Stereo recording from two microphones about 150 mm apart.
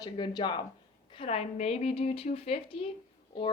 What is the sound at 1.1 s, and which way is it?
A woman's voice, 40° left (ahead or behind).